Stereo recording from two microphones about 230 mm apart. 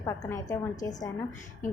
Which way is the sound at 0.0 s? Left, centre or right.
Centre.